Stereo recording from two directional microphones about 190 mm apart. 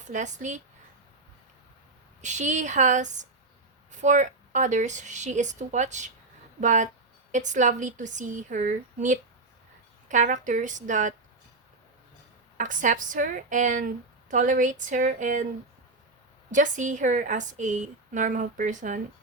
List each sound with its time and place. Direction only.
0.1 s a woman's voice: 40° right (ahead or behind)
2.2 s a woman's voice: 40° right (ahead or behind)
12.5 s a woman's voice: 45° right (ahead or behind)
16.5 s a woman's voice: 40° right (ahead or behind)